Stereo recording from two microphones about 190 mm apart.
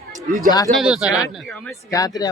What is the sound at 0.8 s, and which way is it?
Speech, centre (ahead or behind).